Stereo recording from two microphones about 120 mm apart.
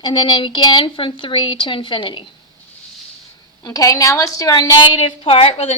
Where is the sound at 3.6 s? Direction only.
30° left (ahead or behind).